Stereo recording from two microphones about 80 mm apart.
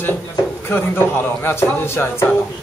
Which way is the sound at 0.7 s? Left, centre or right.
Left.